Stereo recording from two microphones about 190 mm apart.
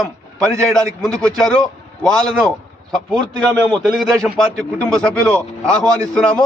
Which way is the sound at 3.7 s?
Centre (ahead or behind).